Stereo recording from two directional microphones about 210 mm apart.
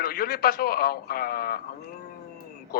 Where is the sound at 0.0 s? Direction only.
45° left (ahead or behind).